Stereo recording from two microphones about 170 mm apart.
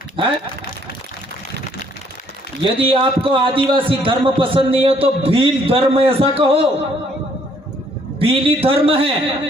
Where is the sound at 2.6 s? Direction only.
30° right (ahead or behind).